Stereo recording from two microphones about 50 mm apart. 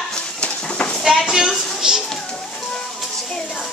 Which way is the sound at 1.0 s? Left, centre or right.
Centre.